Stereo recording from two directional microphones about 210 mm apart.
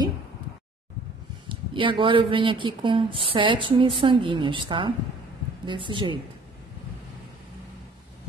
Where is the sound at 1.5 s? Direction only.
25° right (ahead or behind).